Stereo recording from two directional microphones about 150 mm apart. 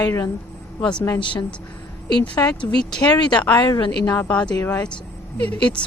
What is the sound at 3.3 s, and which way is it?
Speech, 10° left (ahead or behind).